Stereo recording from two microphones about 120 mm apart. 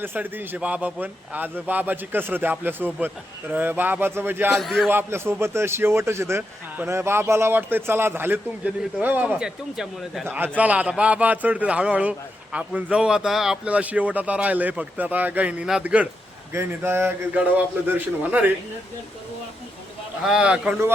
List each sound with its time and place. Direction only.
0.0 s a man's voice: 15° right (ahead or behind)
4.5 s speech: centre (ahead or behind)
4.9 s a man's voice: 20° right (ahead or behind); by 10.2 s 5° right (ahead or behind)
10.2 s a man's voice: 15° right (ahead or behind)
16.5 s a man's voice: 20° right (ahead or behind)
20.2 s a man's voice: 5° right (ahead or behind)